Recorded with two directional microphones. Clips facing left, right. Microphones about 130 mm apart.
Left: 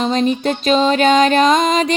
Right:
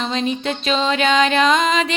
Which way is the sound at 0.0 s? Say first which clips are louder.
Left 5 dB; 45° left (ahead or behind).